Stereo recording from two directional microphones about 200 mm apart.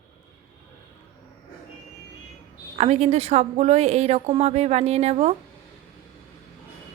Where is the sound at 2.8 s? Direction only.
35° right (ahead or behind).